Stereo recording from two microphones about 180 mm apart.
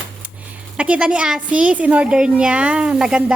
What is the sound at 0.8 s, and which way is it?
A woman's voice, 5° right (ahead or behind).